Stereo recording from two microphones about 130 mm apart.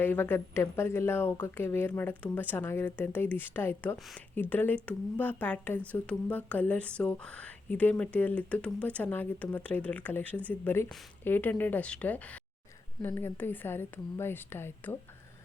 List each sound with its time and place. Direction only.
0.0 s speech: 15° left (ahead or behind)
3.9 s speech: centre (ahead or behind)
4.4 s speech: 15° left (ahead or behind)